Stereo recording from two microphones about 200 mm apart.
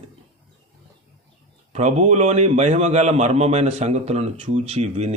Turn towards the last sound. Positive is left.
turn(degrees=-30)  # may be behind; listen again after turning